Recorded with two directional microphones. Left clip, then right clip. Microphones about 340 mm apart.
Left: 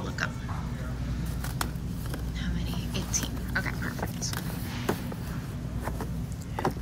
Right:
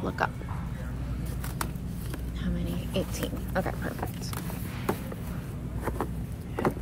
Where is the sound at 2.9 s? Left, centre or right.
Centre.